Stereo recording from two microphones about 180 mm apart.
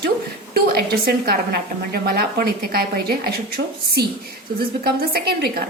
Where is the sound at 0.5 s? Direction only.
60° right (ahead or behind).